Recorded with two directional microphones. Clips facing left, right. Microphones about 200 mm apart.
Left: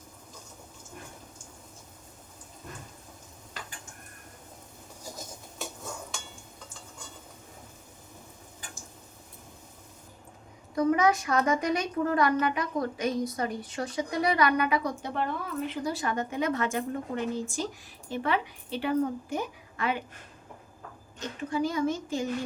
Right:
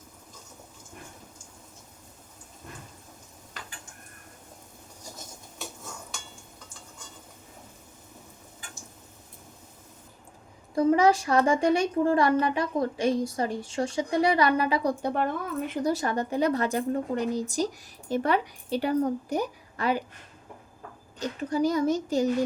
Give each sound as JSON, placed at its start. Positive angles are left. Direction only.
{"t": 10.8, "sound": "speech", "side_deg": -30}
{"t": 15.0, "sound": "a woman's voice", "side_deg": -50}
{"t": 21.2, "sound": "a woman's voice", "side_deg": -40}